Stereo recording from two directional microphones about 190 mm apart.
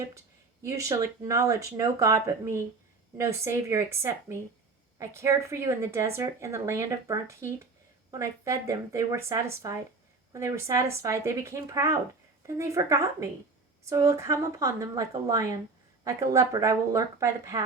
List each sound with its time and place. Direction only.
0.6 s speech: 15° right (ahead or behind)